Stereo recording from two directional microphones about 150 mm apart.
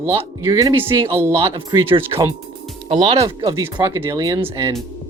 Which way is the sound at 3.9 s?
20° right (ahead or behind).